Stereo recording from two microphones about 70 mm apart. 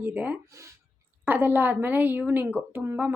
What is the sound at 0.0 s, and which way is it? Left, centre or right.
A woman's voice, right.